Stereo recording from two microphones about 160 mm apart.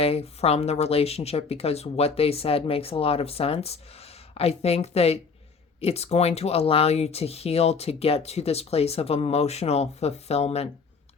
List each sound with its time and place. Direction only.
0.0 s speech: 40° left (ahead or behind)